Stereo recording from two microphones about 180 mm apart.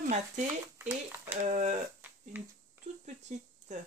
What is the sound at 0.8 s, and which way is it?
Speech, 10° right (ahead or behind).